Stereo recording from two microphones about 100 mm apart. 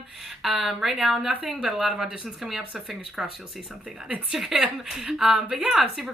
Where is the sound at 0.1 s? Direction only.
5° right (ahead or behind).